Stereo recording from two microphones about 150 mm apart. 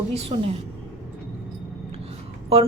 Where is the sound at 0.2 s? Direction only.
40° right (ahead or behind).